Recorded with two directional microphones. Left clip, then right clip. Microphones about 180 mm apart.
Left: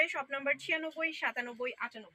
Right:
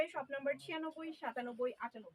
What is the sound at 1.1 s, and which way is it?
Speech, 15° right (ahead or behind).